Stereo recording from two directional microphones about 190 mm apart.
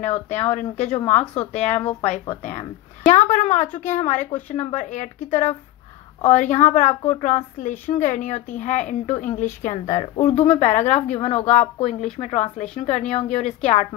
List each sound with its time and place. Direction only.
0.0 s speech: 35° left (ahead or behind)